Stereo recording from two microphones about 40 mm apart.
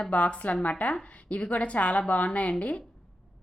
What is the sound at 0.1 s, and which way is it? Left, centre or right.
A woman's voice, left.